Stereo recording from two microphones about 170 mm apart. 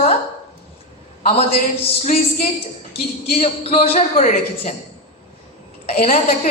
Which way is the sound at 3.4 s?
35° left (ahead or behind).